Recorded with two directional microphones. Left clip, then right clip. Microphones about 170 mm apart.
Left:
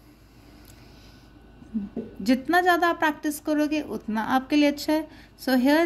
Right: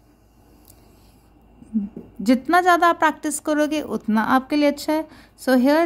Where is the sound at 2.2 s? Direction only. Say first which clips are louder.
Right 4 dB; 30° right (ahead or behind).